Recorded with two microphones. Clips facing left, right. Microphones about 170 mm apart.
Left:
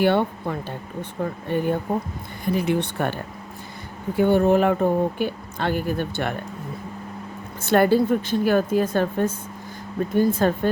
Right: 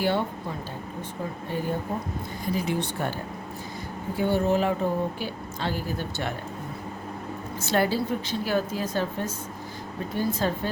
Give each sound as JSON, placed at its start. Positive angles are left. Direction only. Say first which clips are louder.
{"t": 0.0, "sound": "speech", "louder": "left 6 dB", "side_deg": 60}
{"t": 4.2, "sound": "speech", "louder": "left 6 dB", "side_deg": 55}
{"t": 7.6, "sound": "a woman's voice", "louder": "left 7 dB", "side_deg": 55}